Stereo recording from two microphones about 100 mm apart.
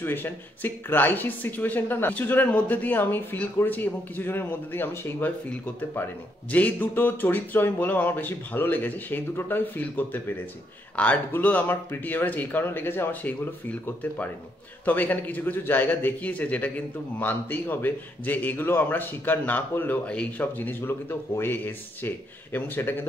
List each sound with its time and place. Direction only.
0.0 s a man's voice: 20° left (ahead or behind)